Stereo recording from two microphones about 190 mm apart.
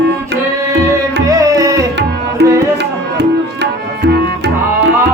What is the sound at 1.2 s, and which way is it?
Music, 15° right (ahead or behind).